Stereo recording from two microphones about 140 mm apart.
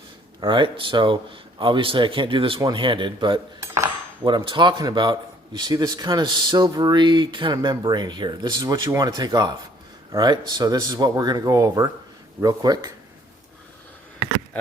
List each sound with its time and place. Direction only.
0.3 s speech: 35° right (ahead or behind)